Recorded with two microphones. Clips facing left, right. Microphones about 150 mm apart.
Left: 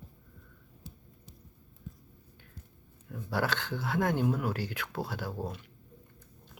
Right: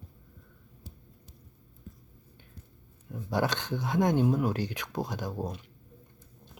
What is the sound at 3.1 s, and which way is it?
Speech, 20° right (ahead or behind).